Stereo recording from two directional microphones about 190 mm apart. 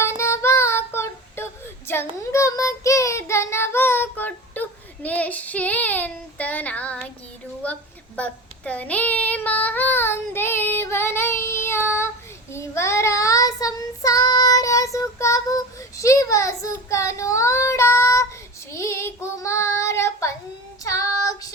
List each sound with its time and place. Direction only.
0.2 s child singing: 15° left (ahead or behind)